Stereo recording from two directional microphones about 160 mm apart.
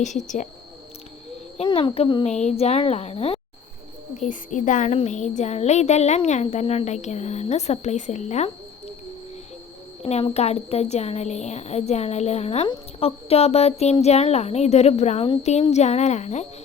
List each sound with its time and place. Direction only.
0.0 s speech: 50° left (ahead or behind)
1.6 s speech: 35° left (ahead or behind)
2.2 s speech: 45° left (ahead or behind)
4.2 s speech: 50° left (ahead or behind)
10.0 s speech: 40° left (ahead or behind)